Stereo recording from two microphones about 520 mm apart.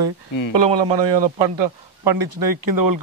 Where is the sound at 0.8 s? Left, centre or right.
Right.